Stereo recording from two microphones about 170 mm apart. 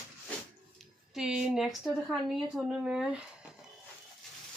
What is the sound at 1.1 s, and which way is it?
Speech, 5° right (ahead or behind).